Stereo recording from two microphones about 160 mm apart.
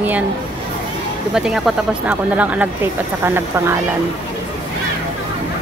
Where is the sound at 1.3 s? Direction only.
5° right (ahead or behind).